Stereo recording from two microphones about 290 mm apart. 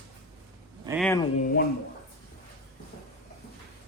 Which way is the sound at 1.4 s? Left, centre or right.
Left.